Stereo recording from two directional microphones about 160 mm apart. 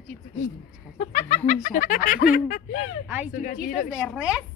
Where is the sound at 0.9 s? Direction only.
45° left (ahead or behind).